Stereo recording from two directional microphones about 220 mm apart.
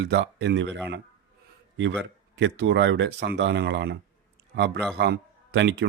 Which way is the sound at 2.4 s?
55° right (ahead or behind).